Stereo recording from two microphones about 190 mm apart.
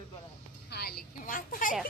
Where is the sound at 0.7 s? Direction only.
55° left (ahead or behind).